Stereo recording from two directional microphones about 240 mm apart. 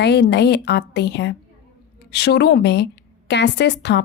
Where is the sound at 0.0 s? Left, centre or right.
Left.